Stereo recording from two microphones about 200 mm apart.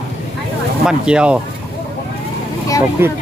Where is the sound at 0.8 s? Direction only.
5° right (ahead or behind).